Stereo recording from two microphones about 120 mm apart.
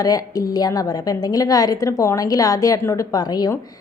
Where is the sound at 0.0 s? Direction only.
30° left (ahead or behind).